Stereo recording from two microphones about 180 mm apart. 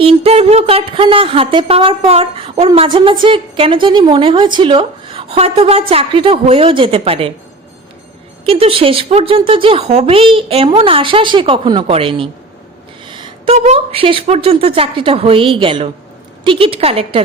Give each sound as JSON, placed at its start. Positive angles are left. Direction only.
{"t": 0.0, "sound": "a woman's voice", "side_deg": -30}
{"t": 8.4, "sound": "a woman's voice", "side_deg": -30}